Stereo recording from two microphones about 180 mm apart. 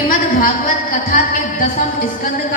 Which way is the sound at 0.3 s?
50° left (ahead or behind).